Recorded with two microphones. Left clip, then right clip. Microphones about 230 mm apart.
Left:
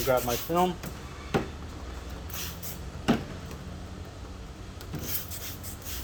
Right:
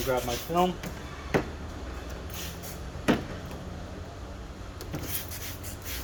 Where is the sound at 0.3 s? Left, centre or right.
Left.